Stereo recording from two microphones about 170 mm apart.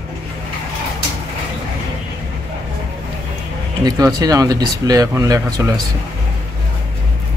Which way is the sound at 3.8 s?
20° right (ahead or behind).